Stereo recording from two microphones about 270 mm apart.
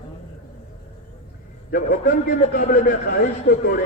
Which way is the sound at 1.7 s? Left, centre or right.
Left.